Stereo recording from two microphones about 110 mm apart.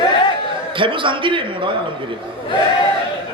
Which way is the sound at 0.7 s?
50° right (ahead or behind).